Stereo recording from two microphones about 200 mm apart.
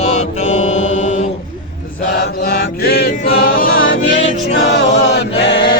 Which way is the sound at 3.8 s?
65° left (ahead or behind).